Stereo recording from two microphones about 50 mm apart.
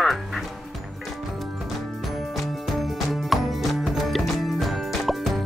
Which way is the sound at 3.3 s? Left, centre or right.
Centre.